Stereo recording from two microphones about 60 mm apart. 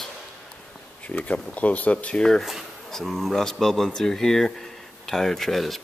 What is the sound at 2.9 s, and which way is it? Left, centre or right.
Speech, centre.